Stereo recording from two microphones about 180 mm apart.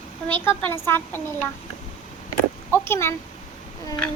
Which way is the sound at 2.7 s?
15° left (ahead or behind).